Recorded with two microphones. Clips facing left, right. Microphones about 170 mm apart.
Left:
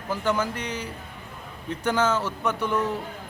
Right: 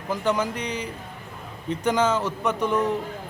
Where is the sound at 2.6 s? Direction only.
30° right (ahead or behind).